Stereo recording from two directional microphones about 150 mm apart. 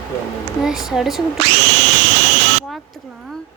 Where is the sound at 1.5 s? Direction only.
90° right.